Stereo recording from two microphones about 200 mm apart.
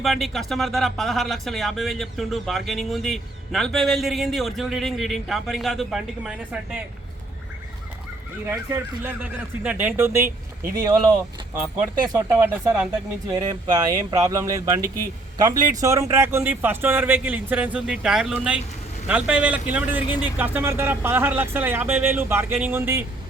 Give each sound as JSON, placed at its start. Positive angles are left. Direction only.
{"t": 0.0, "sound": "speech", "side_deg": 0}
{"t": 8.4, "sound": "speech", "side_deg": -10}
{"t": 13.3, "sound": "speech", "side_deg": -20}